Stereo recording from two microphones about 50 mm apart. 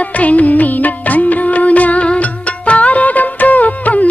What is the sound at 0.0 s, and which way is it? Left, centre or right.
Music, left.